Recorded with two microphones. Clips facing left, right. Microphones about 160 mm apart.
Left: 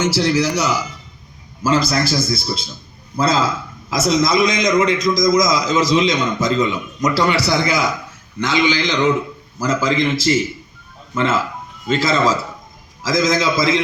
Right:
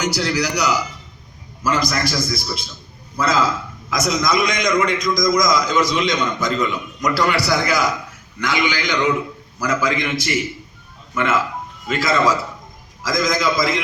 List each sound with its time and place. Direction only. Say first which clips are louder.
0.0 s a man's voice: left 4 dB; 25° left (ahead or behind)
1.9 s a man's voice: left 3 dB; 30° left (ahead or behind)